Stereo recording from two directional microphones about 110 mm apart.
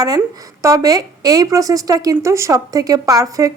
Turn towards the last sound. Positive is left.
turn(degrees=-30)  # may be behind; listen again after turning